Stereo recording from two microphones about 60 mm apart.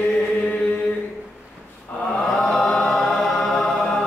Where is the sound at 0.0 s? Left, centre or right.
Centre.